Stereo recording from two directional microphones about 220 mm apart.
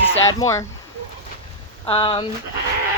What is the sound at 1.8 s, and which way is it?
Speech, 25° left (ahead or behind).